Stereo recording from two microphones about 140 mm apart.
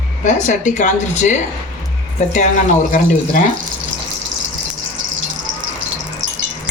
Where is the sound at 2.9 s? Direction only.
65° left (ahead or behind).